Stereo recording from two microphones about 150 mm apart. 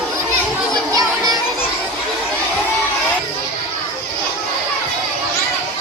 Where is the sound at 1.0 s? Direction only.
25° right (ahead or behind).